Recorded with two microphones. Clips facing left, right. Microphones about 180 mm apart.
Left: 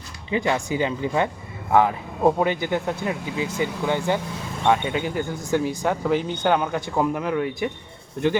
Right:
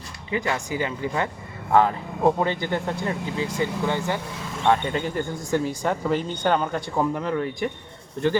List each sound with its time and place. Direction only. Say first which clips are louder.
0.3 s speech: left 3 dB; 20° left (ahead or behind)
1.7 s speech: even; 10° left (ahead or behind)